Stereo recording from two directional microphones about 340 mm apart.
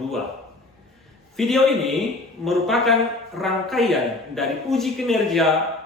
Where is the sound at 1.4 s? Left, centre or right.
Centre.